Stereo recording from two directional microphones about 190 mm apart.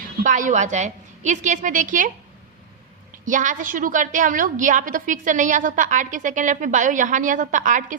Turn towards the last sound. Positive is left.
turn(degrees=-40)  # may be behind; listen again after turning